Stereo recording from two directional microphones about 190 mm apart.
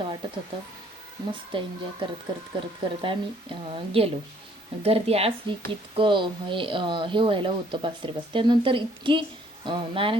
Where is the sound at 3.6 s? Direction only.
30° right (ahead or behind).